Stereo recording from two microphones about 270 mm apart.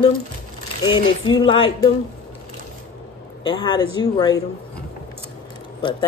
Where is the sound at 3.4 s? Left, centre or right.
Centre.